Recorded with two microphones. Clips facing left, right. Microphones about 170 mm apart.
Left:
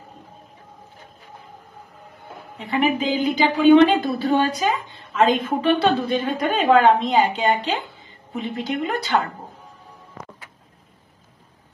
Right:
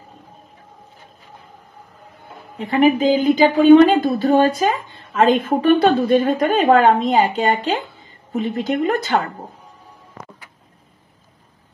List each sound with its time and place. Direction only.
2.6 s speech: 50° right (ahead or behind)